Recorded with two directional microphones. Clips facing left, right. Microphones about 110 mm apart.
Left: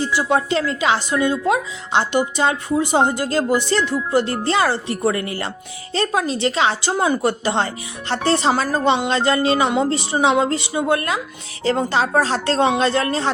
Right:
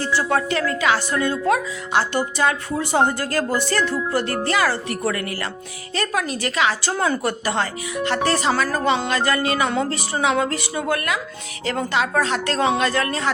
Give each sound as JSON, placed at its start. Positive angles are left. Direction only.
{"t": 0.0, "sound": "a woman's voice", "side_deg": 15}